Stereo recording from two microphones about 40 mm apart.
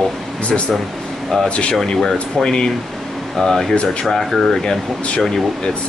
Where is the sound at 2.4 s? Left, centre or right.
Centre.